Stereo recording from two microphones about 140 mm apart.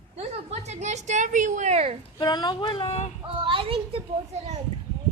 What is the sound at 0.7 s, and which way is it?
A child's voice, 55° right (ahead or behind).